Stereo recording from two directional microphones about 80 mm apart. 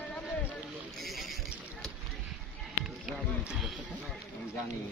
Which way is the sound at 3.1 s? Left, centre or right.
Centre.